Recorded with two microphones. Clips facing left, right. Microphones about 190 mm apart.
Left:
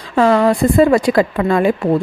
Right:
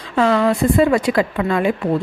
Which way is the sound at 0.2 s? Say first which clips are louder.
Left 3 dB; 45° left (ahead or behind).